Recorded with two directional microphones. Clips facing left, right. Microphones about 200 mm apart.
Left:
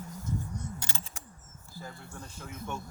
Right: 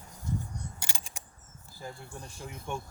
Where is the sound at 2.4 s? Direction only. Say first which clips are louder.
Right 1 dB; 15° right (ahead or behind).